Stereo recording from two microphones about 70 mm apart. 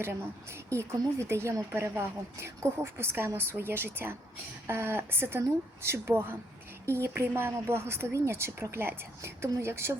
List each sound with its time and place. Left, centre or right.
0.7 s speech: right